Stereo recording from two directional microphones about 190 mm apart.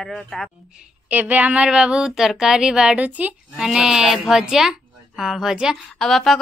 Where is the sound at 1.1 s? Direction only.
10° right (ahead or behind).